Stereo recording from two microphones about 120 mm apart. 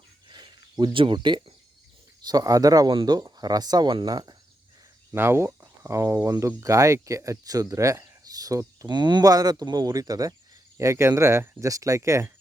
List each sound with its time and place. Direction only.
0.3 s a sound: 40° right (ahead or behind)
0.9 s speech: 40° right (ahead or behind)
5.1 s speech: 20° right (ahead or behind)